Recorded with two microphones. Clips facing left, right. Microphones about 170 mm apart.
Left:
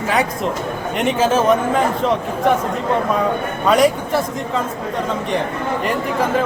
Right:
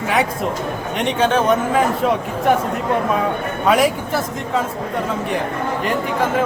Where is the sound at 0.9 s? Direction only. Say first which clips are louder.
Left 1 dB; centre (ahead or behind).